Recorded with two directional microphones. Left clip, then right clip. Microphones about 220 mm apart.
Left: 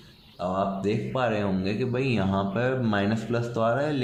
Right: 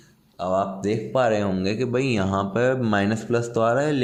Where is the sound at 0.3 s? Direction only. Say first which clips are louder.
Right 4 dB; 25° right (ahead or behind).